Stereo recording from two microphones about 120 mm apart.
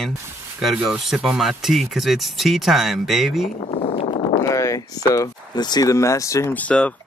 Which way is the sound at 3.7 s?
65° left (ahead or behind).